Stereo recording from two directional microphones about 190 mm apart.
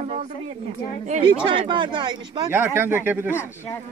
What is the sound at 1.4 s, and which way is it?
Speech, 25° right (ahead or behind).